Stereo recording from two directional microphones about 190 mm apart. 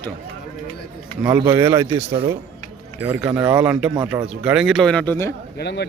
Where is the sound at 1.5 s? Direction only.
15° right (ahead or behind); by 5.3 s 10° left (ahead or behind).